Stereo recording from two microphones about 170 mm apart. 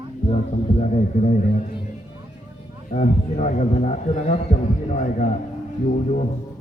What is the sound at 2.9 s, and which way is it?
A man's voice, 40° left (ahead or behind).